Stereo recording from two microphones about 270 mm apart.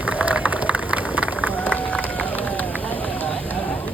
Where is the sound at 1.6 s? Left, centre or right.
Centre.